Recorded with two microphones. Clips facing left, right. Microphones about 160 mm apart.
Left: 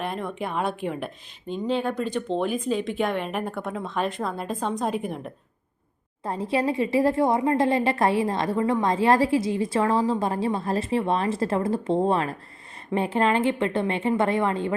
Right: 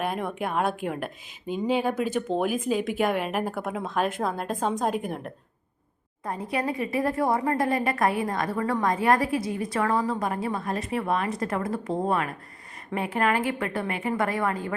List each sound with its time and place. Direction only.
0.0 s a woman's voice: 5° right (ahead or behind)
6.2 s a woman's voice: 30° left (ahead or behind)